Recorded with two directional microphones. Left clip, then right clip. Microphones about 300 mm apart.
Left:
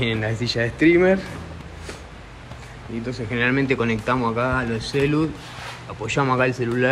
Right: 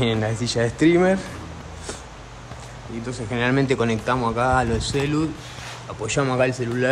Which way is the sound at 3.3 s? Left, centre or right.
Centre.